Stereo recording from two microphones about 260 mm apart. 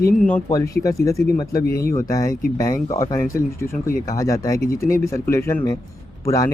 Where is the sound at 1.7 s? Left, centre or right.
Left.